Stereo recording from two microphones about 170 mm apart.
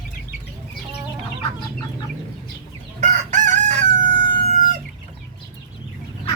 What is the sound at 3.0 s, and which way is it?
Crowing, 45° right (ahead or behind).